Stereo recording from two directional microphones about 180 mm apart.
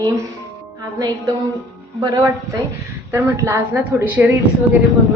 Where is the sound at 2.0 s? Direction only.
20° right (ahead or behind).